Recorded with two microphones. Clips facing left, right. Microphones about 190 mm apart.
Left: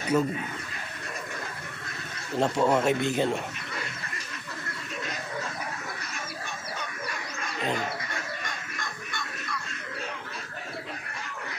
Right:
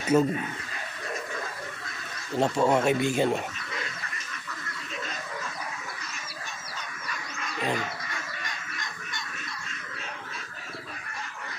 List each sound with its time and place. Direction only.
0.1 s speech: 30° right (ahead or behind)
2.3 s a man's voice: 5° right (ahead or behind)
8.7 s music: 55° left (ahead or behind)